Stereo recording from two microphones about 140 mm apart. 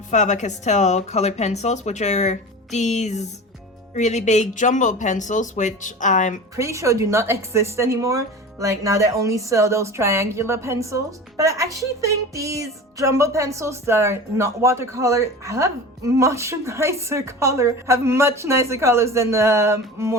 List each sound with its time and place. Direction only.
0.1 s speech: 60° left (ahead or behind)
6.6 s a woman's voice: 20° right (ahead or behind)